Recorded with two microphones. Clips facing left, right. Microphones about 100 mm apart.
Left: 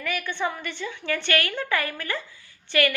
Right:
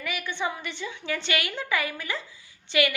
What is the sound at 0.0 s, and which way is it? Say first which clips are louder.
A woman's voice: left 2 dB; 15° right (ahead or behind).